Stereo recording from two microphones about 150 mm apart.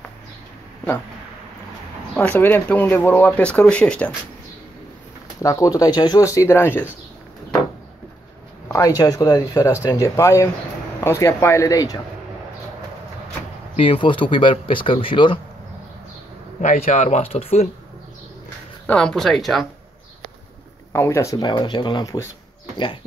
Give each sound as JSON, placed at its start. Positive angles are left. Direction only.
{"t": 2.1, "sound": "speech", "side_deg": 15}
{"t": 5.4, "sound": "speech", "side_deg": 20}
{"t": 8.6, "sound": "speech", "side_deg": 20}
{"t": 13.7, "sound": "speech", "side_deg": 35}
{"t": 16.6, "sound": "speech", "side_deg": 50}
{"t": 18.9, "sound": "speech", "side_deg": 5}
{"t": 20.9, "sound": "speech", "side_deg": 20}